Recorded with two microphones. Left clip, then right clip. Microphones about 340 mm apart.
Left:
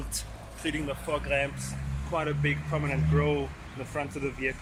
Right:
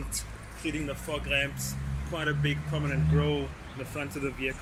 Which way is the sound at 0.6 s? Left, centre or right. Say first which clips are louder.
Left 2 dB; left.